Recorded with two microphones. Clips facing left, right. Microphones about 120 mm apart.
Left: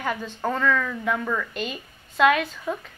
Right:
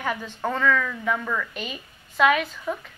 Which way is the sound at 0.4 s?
5° left (ahead or behind).